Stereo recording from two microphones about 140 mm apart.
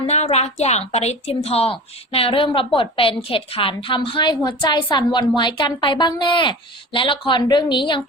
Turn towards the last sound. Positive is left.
turn(degrees=35)  # may be behind; listen again after turning